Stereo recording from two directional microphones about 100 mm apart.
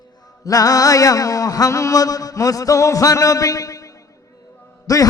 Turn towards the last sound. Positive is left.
turn(degrees=35)  # may be behind; listen again after turning